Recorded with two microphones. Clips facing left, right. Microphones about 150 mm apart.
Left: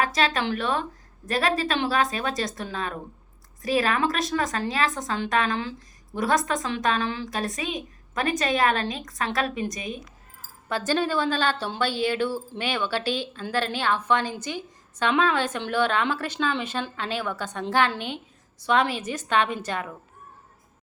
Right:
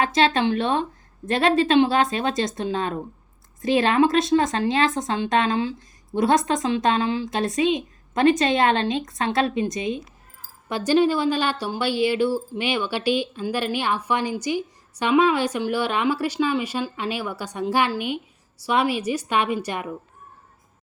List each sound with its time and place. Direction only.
0.0 s a woman's voice: 30° right (ahead or behind)
10.7 s speech: 15° right (ahead or behind)